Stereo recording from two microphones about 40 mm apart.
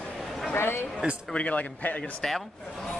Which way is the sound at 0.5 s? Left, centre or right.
Left.